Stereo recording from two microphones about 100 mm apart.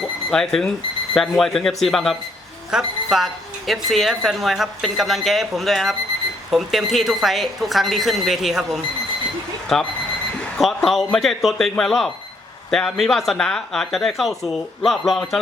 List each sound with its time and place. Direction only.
0.3 s speech: 5° left (ahead or behind)